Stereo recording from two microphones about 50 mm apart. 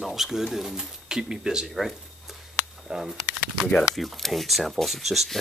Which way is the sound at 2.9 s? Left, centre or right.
Centre.